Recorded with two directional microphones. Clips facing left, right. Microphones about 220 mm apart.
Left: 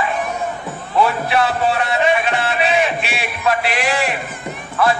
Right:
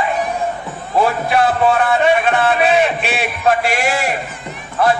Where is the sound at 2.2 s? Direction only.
50° right (ahead or behind).